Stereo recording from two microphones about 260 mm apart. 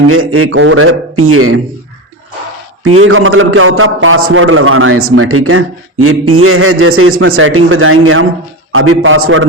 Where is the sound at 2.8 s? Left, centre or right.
Right.